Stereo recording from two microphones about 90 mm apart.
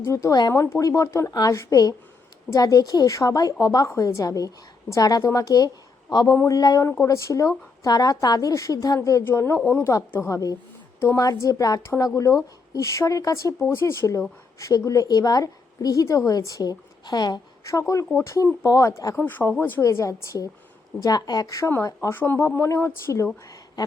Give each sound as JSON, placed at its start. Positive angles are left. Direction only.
{"t": 0.0, "sound": "a woman's voice", "side_deg": 35}
{"t": 7.9, "sound": "a woman's voice", "side_deg": 45}
{"t": 9.2, "sound": "a woman's voice", "side_deg": 30}
{"t": 17.6, "sound": "a woman's voice", "side_deg": 35}
{"t": 19.1, "sound": "speech", "side_deg": 20}
{"t": 19.8, "sound": "a woman's voice", "side_deg": 35}
{"t": 21.0, "sound": "a woman's voice", "side_deg": 45}
{"t": 22.1, "sound": "speech", "side_deg": 25}